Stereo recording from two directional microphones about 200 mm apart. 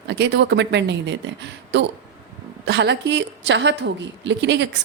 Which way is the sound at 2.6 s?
60° right (ahead or behind).